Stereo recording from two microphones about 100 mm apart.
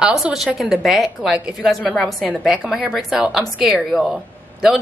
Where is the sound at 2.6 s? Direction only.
5° right (ahead or behind).